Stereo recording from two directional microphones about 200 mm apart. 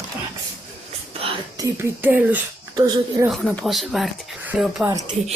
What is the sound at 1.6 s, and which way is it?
Speech, 10° right (ahead or behind).